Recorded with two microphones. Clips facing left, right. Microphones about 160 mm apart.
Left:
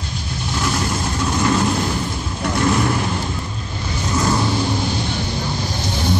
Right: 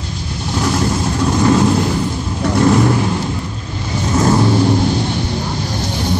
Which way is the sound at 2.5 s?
30° right (ahead or behind).